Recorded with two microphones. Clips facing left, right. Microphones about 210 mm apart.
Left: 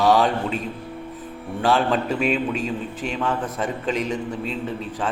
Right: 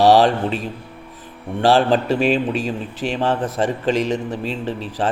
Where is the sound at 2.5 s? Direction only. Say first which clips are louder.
Right 2 dB; 80° right.